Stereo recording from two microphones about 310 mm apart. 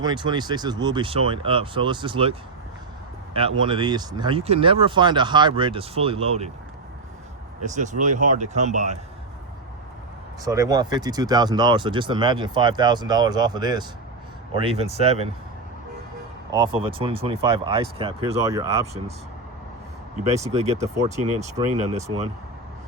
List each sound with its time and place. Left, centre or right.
0.0 s speech: centre
3.6 s speech: centre
7.6 s speech: right
10.4 s speech: centre
16.5 s speech: centre
20.2 s speech: right
21.8 s speech: right